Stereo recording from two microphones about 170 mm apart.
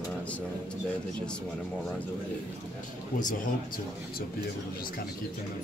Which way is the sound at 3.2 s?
50° left (ahead or behind).